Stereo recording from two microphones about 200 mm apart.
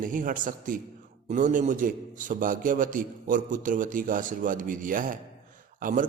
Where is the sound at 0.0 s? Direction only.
40° right (ahead or behind).